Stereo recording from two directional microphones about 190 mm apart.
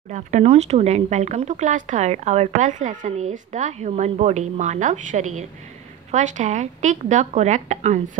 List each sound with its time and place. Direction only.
0.1 s speech: 35° right (ahead or behind)